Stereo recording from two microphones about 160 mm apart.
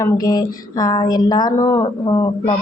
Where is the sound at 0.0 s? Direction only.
25° left (ahead or behind).